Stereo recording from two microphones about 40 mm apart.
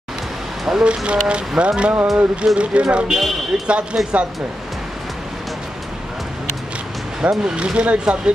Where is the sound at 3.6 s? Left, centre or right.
Right.